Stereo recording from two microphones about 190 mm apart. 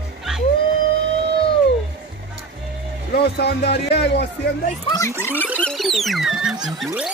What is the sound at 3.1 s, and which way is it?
Speech, 60° left (ahead or behind).